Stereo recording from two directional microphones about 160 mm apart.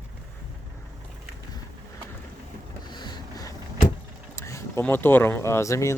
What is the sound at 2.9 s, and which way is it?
Boat, 25° left (ahead or behind).